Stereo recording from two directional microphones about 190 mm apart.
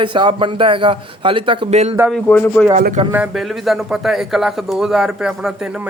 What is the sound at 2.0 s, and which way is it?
Speech, 5° right (ahead or behind).